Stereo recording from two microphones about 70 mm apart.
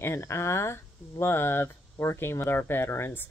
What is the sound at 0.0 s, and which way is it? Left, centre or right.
Speech, left.